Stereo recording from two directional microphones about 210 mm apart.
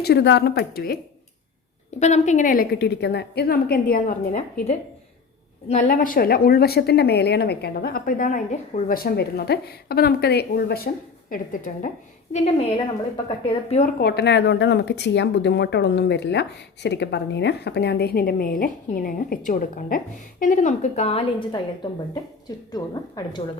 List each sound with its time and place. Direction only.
0.0 s a woman's voice: 50° left (ahead or behind)
2.0 s a woman's voice: 35° left (ahead or behind)
12.3 s a woman's voice: 25° left (ahead or behind)
14.0 s a woman's voice: 50° left (ahead or behind); by 21.6 s 30° left (ahead or behind)
22.7 s a woman's voice: 20° left (ahead or behind)